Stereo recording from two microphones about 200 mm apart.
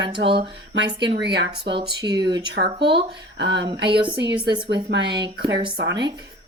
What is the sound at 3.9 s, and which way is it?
Speech, 25° right (ahead or behind).